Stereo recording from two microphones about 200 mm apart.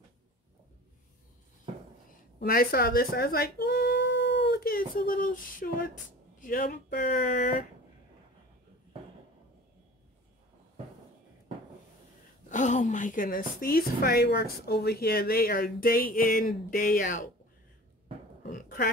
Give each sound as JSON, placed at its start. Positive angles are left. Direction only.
{"t": 2.0, "sound": "speech", "side_deg": 45}
{"t": 12.4, "sound": "a woman's voice", "side_deg": 40}
{"t": 18.4, "sound": "a sound", "side_deg": 40}